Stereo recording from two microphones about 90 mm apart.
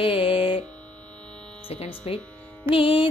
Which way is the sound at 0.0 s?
75° left (ahead or behind).